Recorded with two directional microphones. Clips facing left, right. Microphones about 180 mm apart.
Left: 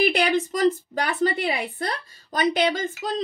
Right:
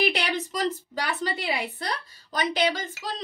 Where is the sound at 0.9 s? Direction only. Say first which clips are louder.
Left 6 dB; 50° left (ahead or behind).